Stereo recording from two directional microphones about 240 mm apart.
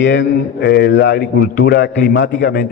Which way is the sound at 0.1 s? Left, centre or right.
Left.